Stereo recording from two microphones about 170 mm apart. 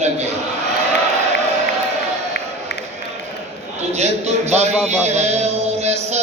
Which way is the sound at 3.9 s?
40° right (ahead or behind).